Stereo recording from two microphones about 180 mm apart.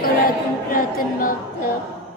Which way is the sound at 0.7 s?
50° left (ahead or behind).